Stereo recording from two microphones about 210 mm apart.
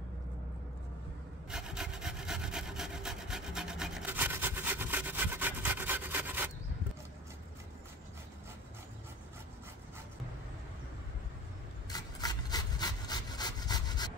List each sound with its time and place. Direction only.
1.5 s wood: 5° right (ahead or behind)
11.9 s rub: 20° left (ahead or behind)